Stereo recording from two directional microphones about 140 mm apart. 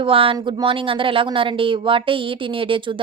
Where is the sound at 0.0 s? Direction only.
40° right (ahead or behind).